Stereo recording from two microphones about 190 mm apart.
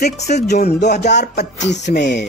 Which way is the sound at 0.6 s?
60° left (ahead or behind).